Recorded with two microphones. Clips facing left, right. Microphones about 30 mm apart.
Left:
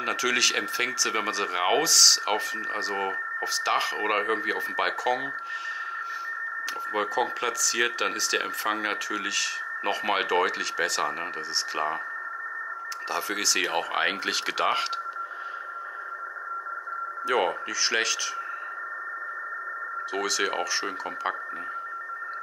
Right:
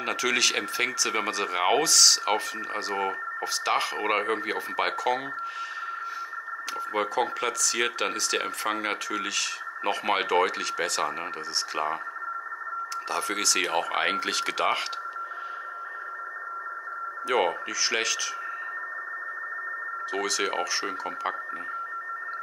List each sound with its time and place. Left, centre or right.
0.0 s speech: centre
6.9 s speech: centre
13.1 s speech: centre
17.3 s speech: centre
20.2 s speech: centre